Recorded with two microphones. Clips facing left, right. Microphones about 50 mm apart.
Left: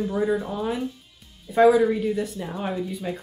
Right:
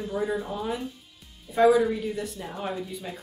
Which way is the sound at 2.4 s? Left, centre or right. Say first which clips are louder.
Left 4 dB; left.